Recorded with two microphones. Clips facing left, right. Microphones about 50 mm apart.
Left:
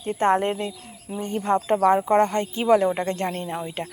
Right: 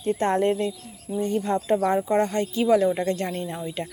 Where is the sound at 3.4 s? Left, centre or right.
Left.